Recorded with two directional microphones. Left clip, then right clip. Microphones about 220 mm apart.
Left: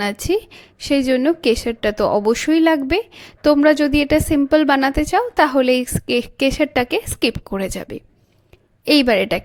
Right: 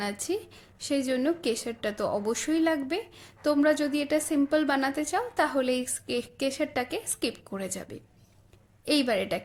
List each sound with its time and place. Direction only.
0.0 s a woman's voice: 35° left (ahead or behind)